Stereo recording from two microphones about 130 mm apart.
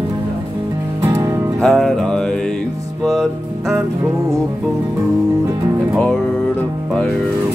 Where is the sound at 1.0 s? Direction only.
25° right (ahead or behind).